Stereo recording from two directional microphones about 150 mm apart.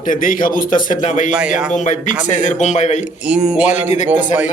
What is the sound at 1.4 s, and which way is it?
Speech, 5° right (ahead or behind).